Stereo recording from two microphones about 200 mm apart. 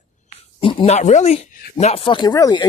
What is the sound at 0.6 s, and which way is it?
Speech, 25° left (ahead or behind).